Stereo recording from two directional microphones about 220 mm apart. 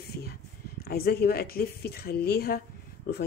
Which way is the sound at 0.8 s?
45° left (ahead or behind).